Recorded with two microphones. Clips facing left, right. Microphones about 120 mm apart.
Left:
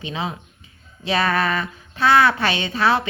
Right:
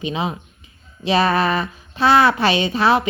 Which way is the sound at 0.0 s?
20° right (ahead or behind).